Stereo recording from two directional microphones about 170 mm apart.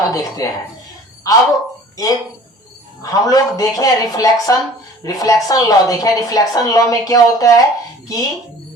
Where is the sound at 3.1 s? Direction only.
20° left (ahead or behind).